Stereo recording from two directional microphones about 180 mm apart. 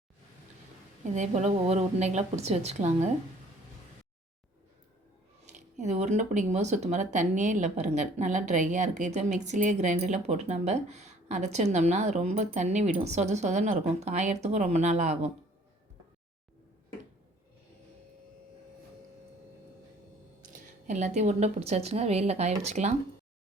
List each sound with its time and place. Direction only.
1.0 s speech: 40° right (ahead or behind)
5.5 s speech: 40° right (ahead or behind)
20.8 s speech: 40° right (ahead or behind)